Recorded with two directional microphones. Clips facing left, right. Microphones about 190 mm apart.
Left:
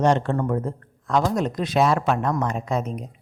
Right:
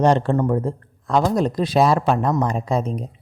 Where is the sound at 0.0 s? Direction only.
35° right (ahead or behind).